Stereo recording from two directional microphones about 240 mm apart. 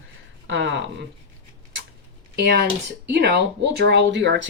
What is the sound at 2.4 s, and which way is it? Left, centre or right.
Speech, right.